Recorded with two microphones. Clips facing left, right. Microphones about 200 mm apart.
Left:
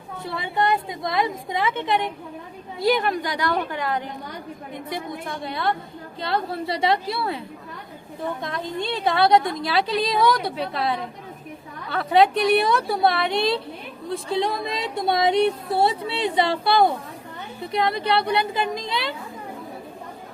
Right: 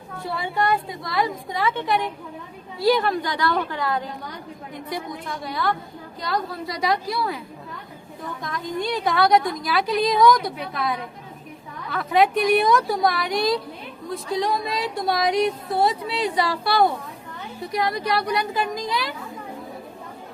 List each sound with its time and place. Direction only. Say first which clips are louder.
0.3 s speech: even; 20° left (ahead or behind)